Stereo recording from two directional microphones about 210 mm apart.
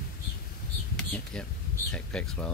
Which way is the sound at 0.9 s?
5° left (ahead or behind).